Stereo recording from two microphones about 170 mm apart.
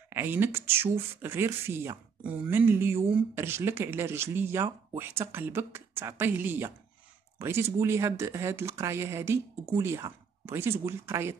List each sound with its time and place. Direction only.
0.1 s speech: 15° right (ahead or behind)